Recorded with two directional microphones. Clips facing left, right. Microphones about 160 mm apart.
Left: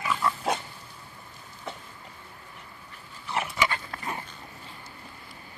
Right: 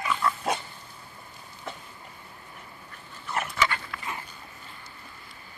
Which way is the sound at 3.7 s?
35° left (ahead or behind).